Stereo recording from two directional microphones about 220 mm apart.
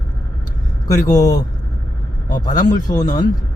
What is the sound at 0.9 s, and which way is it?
Speech, 15° left (ahead or behind).